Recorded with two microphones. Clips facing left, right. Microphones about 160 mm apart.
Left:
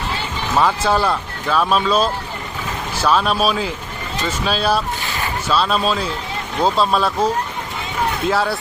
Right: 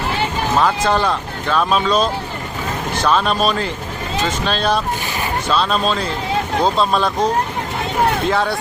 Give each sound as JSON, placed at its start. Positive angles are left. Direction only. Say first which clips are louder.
{"t": 0.6, "sound": "speech", "louder": "left 1 dB", "side_deg": 5}